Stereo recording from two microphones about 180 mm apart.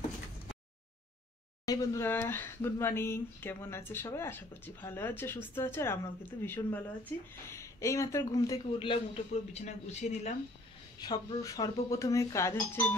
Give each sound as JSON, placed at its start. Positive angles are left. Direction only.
{"t": 1.7, "sound": "speech", "side_deg": 15}
{"t": 8.7, "sound": "a man's voice", "side_deg": 30}
{"t": 11.0, "sound": "speech", "side_deg": 20}